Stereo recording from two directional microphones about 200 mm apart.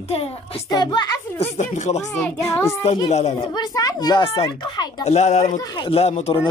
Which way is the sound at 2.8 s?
30° left (ahead or behind).